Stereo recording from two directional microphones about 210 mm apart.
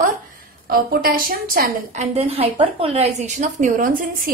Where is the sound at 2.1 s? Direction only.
30° right (ahead or behind).